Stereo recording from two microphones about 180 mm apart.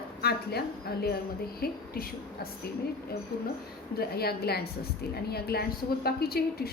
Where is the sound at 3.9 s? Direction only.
60° left (ahead or behind).